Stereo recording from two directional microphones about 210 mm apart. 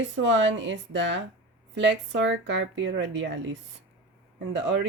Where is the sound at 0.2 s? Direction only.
60° right (ahead or behind).